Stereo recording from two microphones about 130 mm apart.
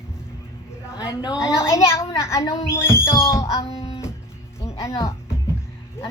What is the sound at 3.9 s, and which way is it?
Music, 20° left (ahead or behind).